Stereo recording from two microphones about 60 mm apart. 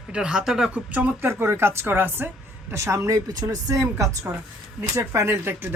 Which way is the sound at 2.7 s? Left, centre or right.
Right.